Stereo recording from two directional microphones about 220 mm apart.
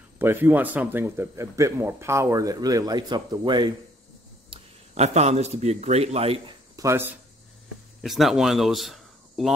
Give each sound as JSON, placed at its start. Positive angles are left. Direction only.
{"t": 0.2, "sound": "a man's voice", "side_deg": -10}
{"t": 8.0, "sound": "speech", "side_deg": 0}